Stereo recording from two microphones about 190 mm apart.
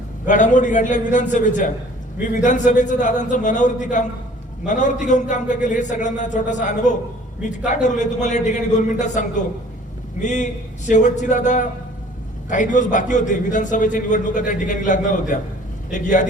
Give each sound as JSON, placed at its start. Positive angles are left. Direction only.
{"t": 0.3, "sound": "a man's voice", "side_deg": 40}